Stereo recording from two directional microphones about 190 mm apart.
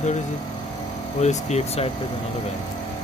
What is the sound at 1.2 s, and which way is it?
Speech, 35° left (ahead or behind).